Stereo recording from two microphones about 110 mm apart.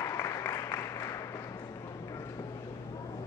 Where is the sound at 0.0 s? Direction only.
30° left (ahead or behind).